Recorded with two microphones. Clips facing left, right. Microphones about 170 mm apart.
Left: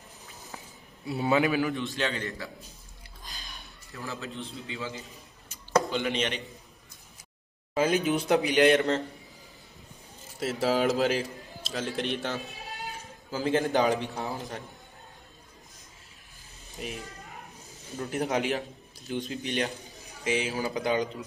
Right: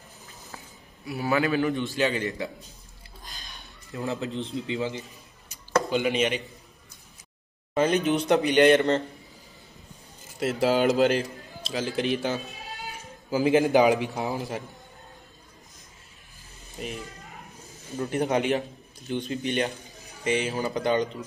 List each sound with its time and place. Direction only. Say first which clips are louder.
1.0 s a man's voice: even; 25° left (ahead or behind)
1.6 s a man's voice: right 4 dB; centre (ahead or behind)
2.2 s a man's voice: right 6 dB; 20° right (ahead or behind)
3.9 s a man's voice: right 7 dB; 20° right (ahead or behind)
5.9 s a man's voice: right 5 dB; 10° right (ahead or behind)
7.7 s a man's voice: right 2 dB; 5° left (ahead or behind)
10.4 s a man's voice: right 3 dB; centre (ahead or behind)
13.3 s a man's voice: right 6 dB; 15° right (ahead or behind)
16.7 s a man's voice: right 2 dB; centre (ahead or behind)